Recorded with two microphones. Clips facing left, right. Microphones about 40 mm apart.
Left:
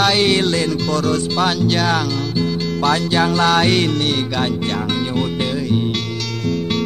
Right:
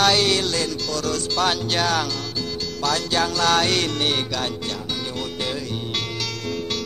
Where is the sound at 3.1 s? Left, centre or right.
Left.